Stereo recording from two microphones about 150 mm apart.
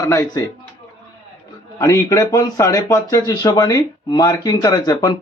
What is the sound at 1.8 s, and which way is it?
Speech, 20° left (ahead or behind).